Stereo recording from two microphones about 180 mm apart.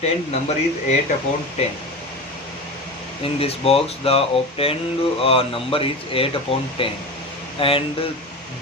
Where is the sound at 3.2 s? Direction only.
30° left (ahead or behind).